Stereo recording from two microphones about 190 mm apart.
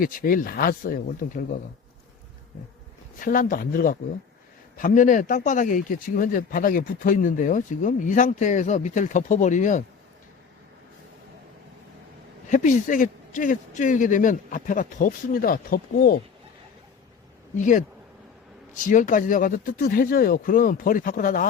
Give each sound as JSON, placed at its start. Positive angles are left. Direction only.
{"t": 0.0, "sound": "speech", "side_deg": 45}
{"t": 3.2, "sound": "speech", "side_deg": 45}
{"t": 12.5, "sound": "speech", "side_deg": 40}
{"t": 17.6, "sound": "speech", "side_deg": 40}